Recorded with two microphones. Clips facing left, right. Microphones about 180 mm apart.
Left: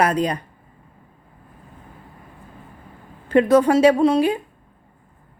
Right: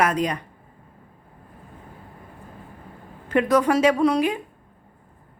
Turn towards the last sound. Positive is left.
turn(degrees=30)  # may be behind; listen again after turning